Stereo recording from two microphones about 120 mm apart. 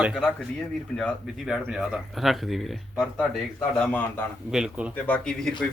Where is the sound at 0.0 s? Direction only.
5° right (ahead or behind).